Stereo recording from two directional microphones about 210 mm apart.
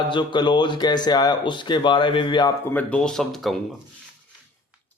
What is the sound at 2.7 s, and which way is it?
Speech, 5° left (ahead or behind).